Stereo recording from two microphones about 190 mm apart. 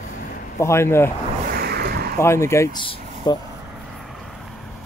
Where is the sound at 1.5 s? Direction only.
55° right (ahead or behind).